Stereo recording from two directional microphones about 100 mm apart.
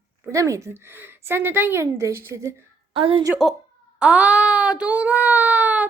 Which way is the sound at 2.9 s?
65° right (ahead or behind).